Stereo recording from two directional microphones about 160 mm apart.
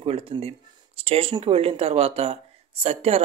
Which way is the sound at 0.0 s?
35° right (ahead or behind).